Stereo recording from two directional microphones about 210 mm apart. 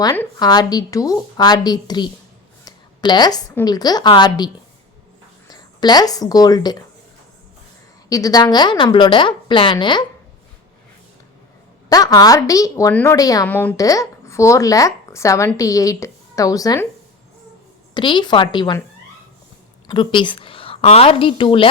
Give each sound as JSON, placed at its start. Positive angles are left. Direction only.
{"t": 0.0, "sound": "a woman's voice", "side_deg": 20}
{"t": 8.1, "sound": "speech", "side_deg": 15}
{"t": 11.9, "sound": "a woman's voice", "side_deg": 20}
{"t": 17.9, "sound": "speech", "side_deg": 20}
{"t": 19.9, "sound": "a woman's voice", "side_deg": 25}